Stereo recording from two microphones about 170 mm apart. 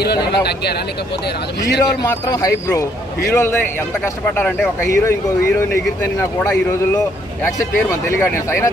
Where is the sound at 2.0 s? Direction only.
20° left (ahead or behind).